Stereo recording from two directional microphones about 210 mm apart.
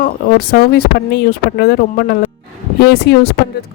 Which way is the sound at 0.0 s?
45° left (ahead or behind).